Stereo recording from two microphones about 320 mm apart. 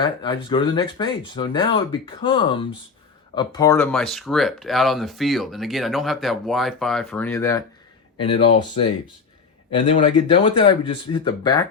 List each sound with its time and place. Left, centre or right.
0.0 s speech: centre
9.9 s speech: centre